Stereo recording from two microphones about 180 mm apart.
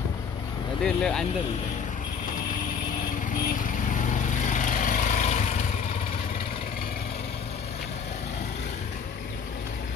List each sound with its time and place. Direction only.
0.8 s speech: 5° left (ahead or behind)
3.9 s lawn mower: 45° left (ahead or behind)